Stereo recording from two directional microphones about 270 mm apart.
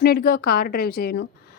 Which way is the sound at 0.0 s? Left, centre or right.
Left.